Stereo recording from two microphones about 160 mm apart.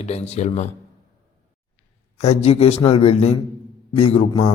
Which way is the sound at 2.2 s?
40° left (ahead or behind).